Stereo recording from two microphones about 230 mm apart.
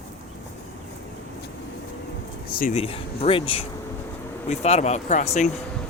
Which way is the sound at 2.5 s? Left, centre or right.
Left.